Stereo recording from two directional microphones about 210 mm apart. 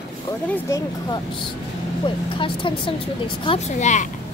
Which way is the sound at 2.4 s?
25° left (ahead or behind).